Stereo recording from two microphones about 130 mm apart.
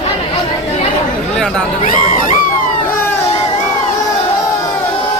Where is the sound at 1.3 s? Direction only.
5° left (ahead or behind).